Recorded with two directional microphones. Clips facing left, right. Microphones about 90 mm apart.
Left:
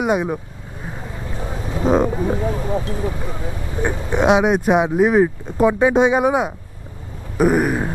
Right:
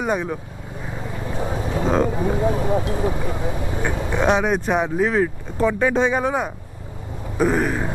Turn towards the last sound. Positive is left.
turn(degrees=10)  # may be behind; listen again after turning